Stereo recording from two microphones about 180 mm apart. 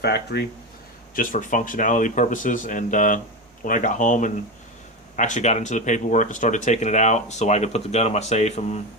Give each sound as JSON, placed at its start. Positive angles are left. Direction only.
{"t": 0.0, "sound": "speech", "side_deg": 65}
{"t": 1.1, "sound": "speech", "side_deg": 50}